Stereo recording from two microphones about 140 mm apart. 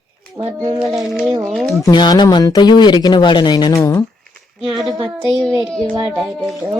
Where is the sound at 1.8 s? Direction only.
30° left (ahead or behind).